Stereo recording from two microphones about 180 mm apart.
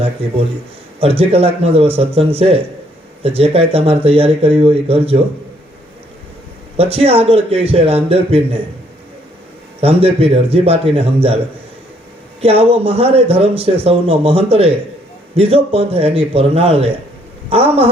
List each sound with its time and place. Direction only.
0.9 s speech: 35° right (ahead or behind)
6.7 s speech: 35° right (ahead or behind)
9.8 s speech: 35° right (ahead or behind)
12.4 s speech: 35° right (ahead or behind)